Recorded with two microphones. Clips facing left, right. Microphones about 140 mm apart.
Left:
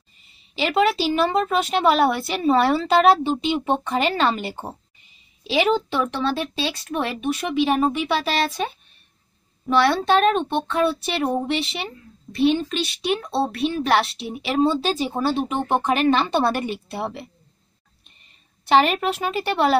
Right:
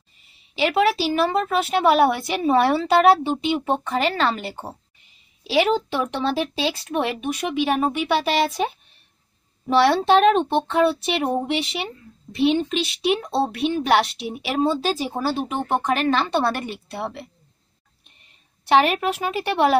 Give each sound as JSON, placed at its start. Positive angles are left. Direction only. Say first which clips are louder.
{"t": 0.6, "sound": "a woman's voice", "louder": "even", "side_deg": -5}
{"t": 6.0, "sound": "a woman's voice", "louder": "right 1 dB", "side_deg": -25}
{"t": 9.7, "sound": "a woman's voice", "louder": "right 2 dB", "side_deg": -25}
{"t": 18.7, "sound": "a woman's voice", "louder": "even", "side_deg": -5}